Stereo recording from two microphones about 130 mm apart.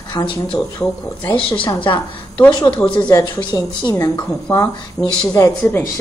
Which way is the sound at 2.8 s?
10° left (ahead or behind).